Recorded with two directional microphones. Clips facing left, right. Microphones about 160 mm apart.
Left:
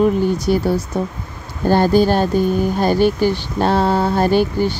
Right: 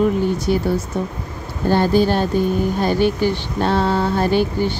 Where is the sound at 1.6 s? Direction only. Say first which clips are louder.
Left 2 dB; 40° left (ahead or behind).